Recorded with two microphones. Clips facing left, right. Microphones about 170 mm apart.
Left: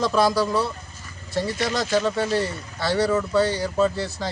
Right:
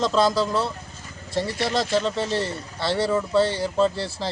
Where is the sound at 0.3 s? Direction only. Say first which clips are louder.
Left 1 dB; 25° right (ahead or behind).